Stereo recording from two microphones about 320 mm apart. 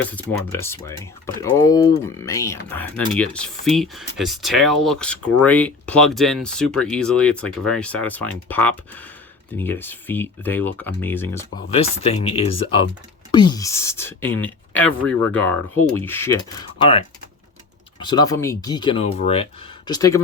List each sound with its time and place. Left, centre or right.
0.0 s speech: centre
11.7 s speech: centre
18.0 s speech: centre